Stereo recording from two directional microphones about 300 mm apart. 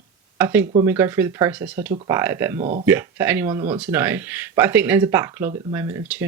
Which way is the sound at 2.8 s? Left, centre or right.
Centre.